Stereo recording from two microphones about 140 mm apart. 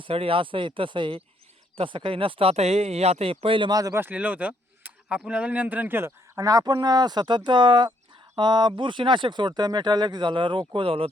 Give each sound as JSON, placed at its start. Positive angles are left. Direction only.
{"t": 0.0, "sound": "speech", "side_deg": -40}
{"t": 4.0, "sound": "speech", "side_deg": -10}